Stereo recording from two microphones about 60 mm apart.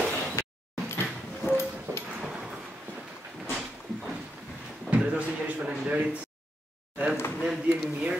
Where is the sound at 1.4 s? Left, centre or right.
Left.